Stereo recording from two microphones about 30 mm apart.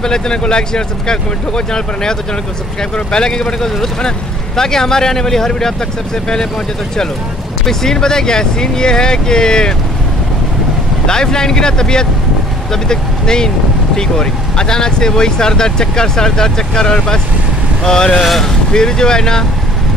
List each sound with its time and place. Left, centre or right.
0.0 s speech: left
7.6 s speech: centre
11.1 s speech: left